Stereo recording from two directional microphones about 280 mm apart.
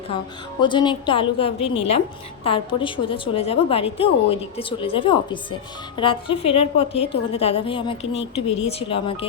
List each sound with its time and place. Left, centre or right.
0.6 s a woman's voice: centre